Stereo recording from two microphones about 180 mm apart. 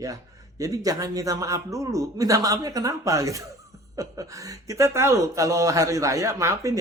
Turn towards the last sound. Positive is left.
turn(degrees=-15)  # may be behind; listen again after turning